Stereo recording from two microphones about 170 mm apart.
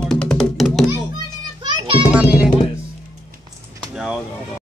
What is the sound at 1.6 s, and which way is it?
Children playing, 25° right (ahead or behind).